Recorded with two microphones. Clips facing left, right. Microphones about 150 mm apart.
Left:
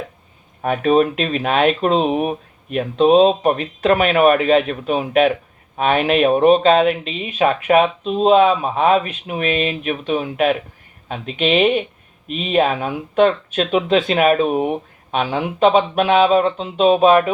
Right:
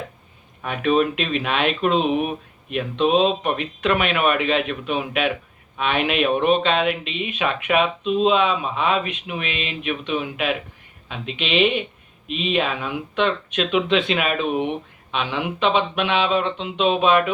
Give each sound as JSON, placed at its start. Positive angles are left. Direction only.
{"t": 0.6, "sound": "speech", "side_deg": 40}